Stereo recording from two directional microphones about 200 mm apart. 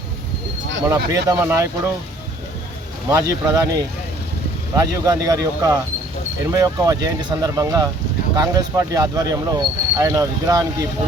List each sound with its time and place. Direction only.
0.9 s speech: 15° right (ahead or behind)
3.1 s speech: 15° right (ahead or behind)
5.0 s speech: 15° right (ahead or behind)